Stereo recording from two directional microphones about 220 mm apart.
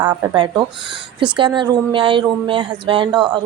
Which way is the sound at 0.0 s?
15° right (ahead or behind).